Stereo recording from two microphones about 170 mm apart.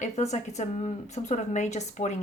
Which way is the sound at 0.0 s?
45° left (ahead or behind).